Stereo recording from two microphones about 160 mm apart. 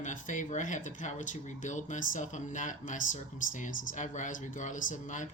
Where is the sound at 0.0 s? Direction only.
50° left (ahead or behind).